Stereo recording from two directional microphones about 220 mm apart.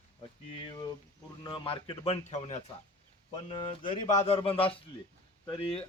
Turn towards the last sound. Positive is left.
turn(degrees=25)  # may be behind; listen again after turning